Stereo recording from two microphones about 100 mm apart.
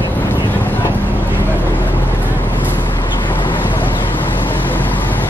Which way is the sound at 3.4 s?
55° left (ahead or behind).